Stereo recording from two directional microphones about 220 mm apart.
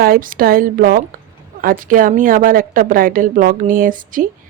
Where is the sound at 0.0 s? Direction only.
40° right (ahead or behind).